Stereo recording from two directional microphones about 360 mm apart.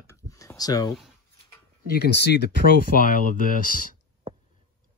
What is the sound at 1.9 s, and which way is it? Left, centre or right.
Speech, left.